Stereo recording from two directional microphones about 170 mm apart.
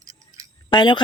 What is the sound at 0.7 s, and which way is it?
Speech, 25° left (ahead or behind).